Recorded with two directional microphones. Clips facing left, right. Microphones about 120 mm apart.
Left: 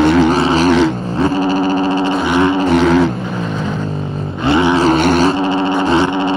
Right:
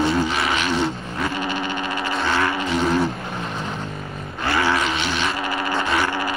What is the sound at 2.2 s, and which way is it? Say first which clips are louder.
Vehicle: left 7 dB; 20° left (ahead or behind).